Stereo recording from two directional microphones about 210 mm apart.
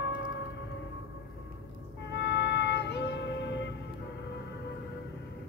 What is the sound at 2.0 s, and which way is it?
Music, 55° left (ahead or behind).